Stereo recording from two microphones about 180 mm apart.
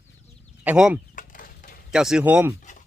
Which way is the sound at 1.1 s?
50° left (ahead or behind).